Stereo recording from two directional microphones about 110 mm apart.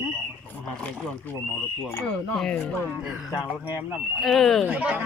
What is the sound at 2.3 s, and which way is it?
Speech, 5° left (ahead or behind).